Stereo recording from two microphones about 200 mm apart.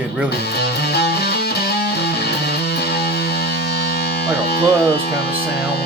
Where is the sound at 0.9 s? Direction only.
50° left (ahead or behind).